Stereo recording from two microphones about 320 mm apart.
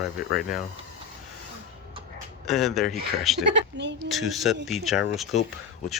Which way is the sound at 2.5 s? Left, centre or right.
Centre.